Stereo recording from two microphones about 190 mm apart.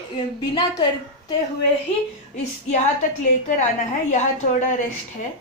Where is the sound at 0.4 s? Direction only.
20° left (ahead or behind).